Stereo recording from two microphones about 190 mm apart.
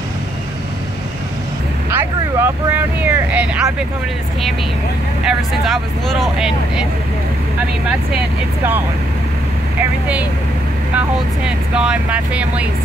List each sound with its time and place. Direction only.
1.9 s speech: 10° right (ahead or behind)
5.2 s speech: centre (ahead or behind)
9.8 s speech: 5° right (ahead or behind)